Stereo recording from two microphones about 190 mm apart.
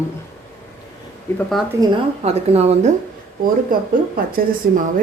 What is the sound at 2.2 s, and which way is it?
Speech, 35° right (ahead or behind).